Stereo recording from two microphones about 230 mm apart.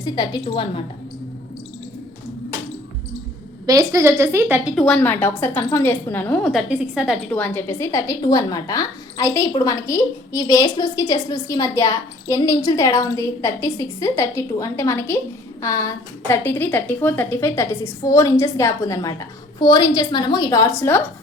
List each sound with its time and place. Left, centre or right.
0.0 s a woman's voice: left
3.7 s speech: centre
4.7 s a woman's voice: centre